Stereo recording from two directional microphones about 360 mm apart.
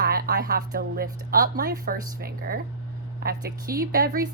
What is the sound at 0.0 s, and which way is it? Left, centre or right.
A woman's voice, right.